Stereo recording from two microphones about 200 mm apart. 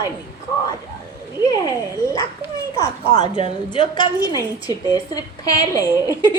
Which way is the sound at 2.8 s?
20° left (ahead or behind).